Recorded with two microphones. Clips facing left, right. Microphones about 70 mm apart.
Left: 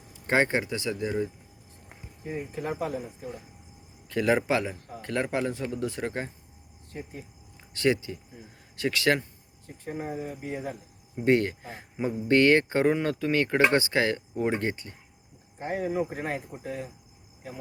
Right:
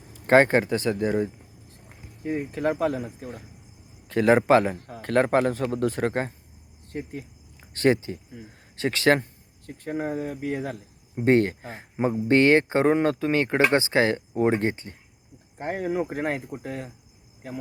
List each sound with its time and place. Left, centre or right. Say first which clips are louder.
0.1 s speech: right 7 dB; right
2.2 s speech: right 7 dB; right
4.1 s speech: right 6 dB; right
7.7 s speech: right 4 dB; right
9.6 s speech: right 5 dB; right
11.1 s speech: right 3 dB; right
15.5 s speech: right 2 dB; right